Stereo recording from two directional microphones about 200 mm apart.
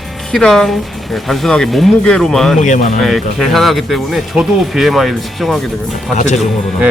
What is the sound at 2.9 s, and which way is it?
Speech, centre (ahead or behind).